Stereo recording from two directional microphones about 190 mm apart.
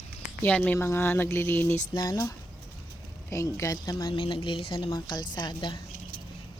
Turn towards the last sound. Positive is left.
turn(degrees=25)  # may be behind; listen again after turning